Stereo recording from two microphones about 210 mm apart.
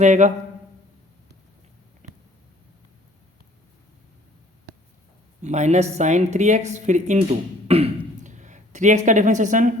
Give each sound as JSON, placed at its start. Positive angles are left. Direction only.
{"t": 0.0, "sound": "speech", "side_deg": -35}
{"t": 2.0, "sound": "a sound", "side_deg": -35}
{"t": 5.4, "sound": "speech", "side_deg": -35}